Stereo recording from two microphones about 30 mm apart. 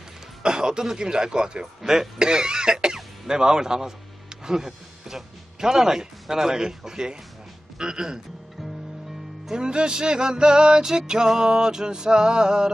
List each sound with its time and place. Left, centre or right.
0.4 s speech: right
0.9 s music: right
1.8 s speech: centre
7.8 s music: right
9.5 s music: right